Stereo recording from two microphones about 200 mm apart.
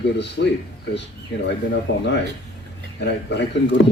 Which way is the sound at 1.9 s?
65° left (ahead or behind).